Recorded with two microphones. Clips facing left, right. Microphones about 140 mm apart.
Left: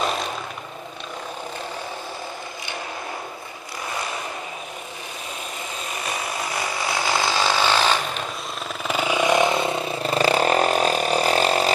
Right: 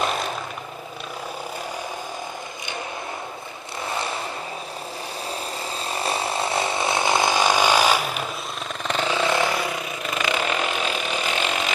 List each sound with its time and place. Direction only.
5.9 s ratchet: 30° right (ahead or behind); by 8.2 s 10° right (ahead or behind)
8.8 s vehicle: 10° left (ahead or behind); by 11.7 s 35° left (ahead or behind)